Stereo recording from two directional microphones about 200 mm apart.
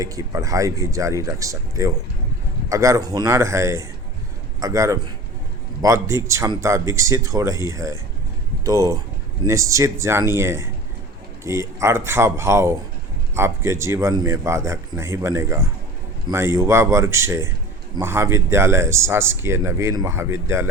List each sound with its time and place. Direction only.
0.0 s speech: 15° right (ahead or behind)